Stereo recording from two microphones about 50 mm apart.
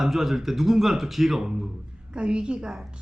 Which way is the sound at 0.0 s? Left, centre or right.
Centre.